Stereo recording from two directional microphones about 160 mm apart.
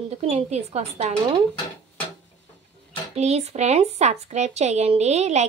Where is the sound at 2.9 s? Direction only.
40° right (ahead or behind).